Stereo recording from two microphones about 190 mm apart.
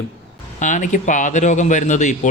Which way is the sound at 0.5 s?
40° left (ahead or behind).